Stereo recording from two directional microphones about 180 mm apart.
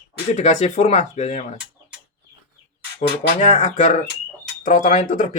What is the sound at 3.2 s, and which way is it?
Speech, 40° left (ahead or behind).